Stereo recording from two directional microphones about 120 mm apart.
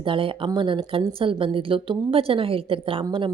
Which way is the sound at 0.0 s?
45° right (ahead or behind).